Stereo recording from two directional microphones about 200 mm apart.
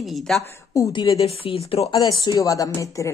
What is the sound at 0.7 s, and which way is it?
A woman's voice, 20° left (ahead or behind).